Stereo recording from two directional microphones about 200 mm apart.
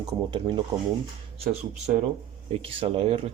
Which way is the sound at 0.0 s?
25° right (ahead or behind).